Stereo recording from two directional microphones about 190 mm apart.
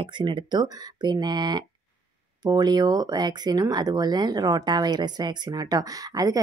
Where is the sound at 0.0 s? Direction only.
25° right (ahead or behind).